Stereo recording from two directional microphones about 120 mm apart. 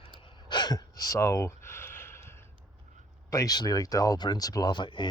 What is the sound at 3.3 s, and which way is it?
Speech, 30° left (ahead or behind).